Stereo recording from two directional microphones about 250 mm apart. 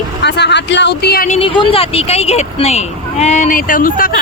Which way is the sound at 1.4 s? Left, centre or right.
Left.